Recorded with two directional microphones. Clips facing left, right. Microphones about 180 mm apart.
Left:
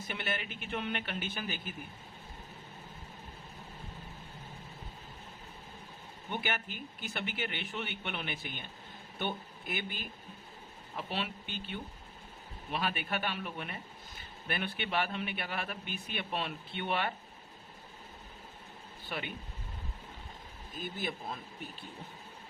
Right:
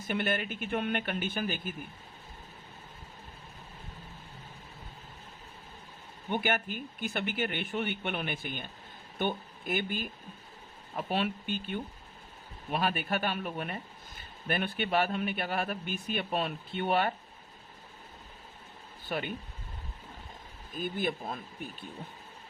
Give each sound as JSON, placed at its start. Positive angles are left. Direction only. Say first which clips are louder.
{"t": 0.1, "sound": "a man's voice", "louder": "right 8 dB", "side_deg": -50}
{"t": 6.3, "sound": "a man's voice", "louder": "right 6 dB", "side_deg": -50}
{"t": 19.1, "sound": "a man's voice", "louder": "right 6 dB", "side_deg": -45}